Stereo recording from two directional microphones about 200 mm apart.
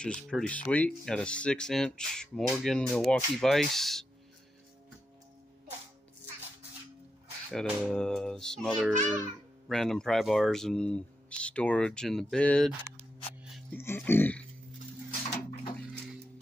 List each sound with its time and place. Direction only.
0.0 s speech: 5° left (ahead or behind)
7.5 s speech: 5° left (ahead or behind)